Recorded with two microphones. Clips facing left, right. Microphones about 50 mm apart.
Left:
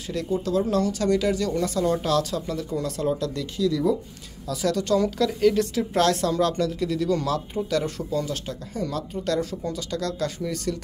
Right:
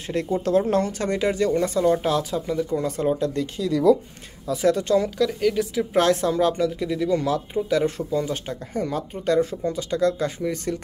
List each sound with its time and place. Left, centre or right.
0.0 s speech: right
5.1 s a woman's voice: centre
5.9 s speech: centre